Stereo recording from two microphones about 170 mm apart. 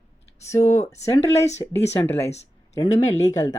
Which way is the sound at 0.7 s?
40° left (ahead or behind).